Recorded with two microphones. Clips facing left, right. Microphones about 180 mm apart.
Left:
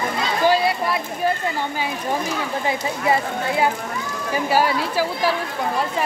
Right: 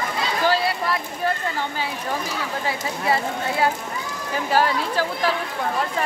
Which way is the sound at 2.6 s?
20° left (ahead or behind).